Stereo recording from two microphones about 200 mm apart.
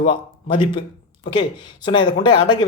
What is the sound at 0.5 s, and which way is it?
Speech, 25° left (ahead or behind).